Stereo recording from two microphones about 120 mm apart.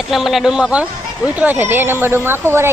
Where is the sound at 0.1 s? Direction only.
Centre (ahead or behind).